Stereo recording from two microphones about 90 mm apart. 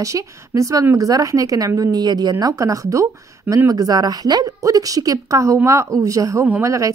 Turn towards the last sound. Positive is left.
turn(degrees=-35)  # may be behind; listen again after turning